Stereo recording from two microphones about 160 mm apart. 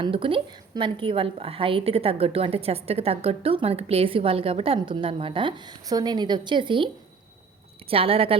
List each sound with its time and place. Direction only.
0.0 s a woman's voice: 35° right (ahead or behind)